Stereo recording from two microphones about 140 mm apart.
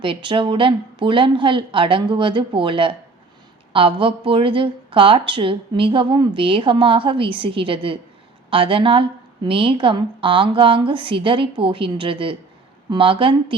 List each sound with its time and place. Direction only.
0.0 s speech: 35° right (ahead or behind)